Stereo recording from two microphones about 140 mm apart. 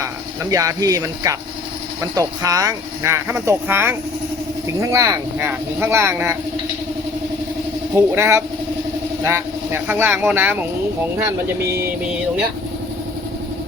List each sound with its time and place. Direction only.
0.5 s speech: 25° right (ahead or behind)
7.9 s speech: 20° right (ahead or behind)